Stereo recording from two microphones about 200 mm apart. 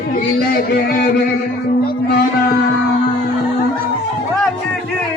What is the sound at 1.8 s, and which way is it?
Music, 50° left (ahead or behind).